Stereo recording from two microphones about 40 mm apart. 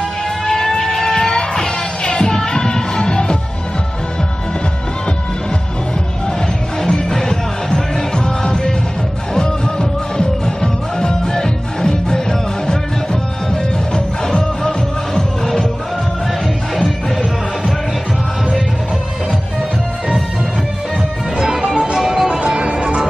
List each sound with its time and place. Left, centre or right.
0.7 s a sound: centre
1.1 s music: centre
6.8 s music: centre
16.7 s music: centre
21.4 s music: centre
22.4 s music: right